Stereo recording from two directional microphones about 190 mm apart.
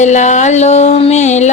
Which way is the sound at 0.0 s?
40° left (ahead or behind).